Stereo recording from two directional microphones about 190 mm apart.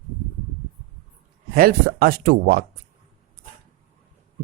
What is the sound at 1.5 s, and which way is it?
Speech, 50° right (ahead or behind).